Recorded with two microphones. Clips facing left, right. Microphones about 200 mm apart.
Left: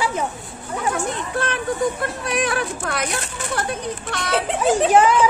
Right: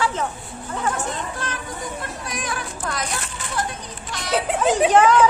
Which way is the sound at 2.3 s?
65° left (ahead or behind).